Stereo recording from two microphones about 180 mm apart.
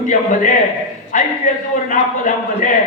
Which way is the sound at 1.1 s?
45° left (ahead or behind).